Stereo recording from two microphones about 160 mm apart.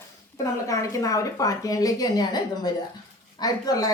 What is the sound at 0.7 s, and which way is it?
A woman's voice, 20° left (ahead or behind).